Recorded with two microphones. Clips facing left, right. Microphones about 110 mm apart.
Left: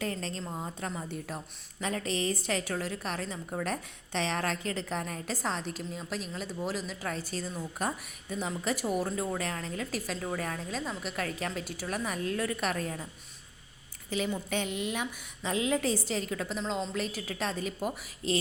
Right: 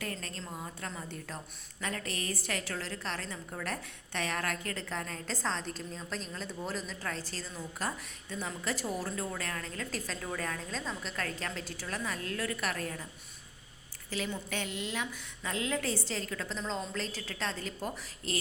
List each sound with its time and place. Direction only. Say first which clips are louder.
0.0 s a woman's voice: left 5 dB; 25° left (ahead or behind)
14.1 s a woman's voice: left 5 dB; 20° left (ahead or behind)